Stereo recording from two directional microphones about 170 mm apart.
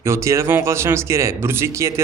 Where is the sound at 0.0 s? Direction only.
15° right (ahead or behind).